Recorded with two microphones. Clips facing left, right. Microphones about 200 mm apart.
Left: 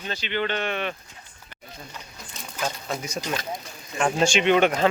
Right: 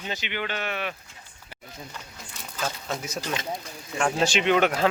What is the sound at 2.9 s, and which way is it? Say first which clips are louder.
Speech: left 1 dB; centre (ahead or behind).